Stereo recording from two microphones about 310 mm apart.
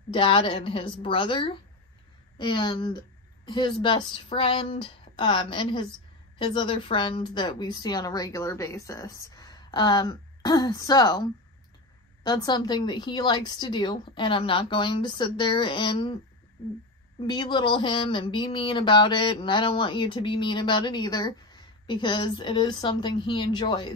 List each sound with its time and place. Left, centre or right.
0.1 s speech: centre
17.3 s speech: centre